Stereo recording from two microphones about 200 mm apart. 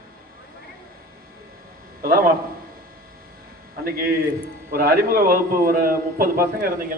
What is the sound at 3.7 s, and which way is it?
A man's voice, 50° right (ahead or behind).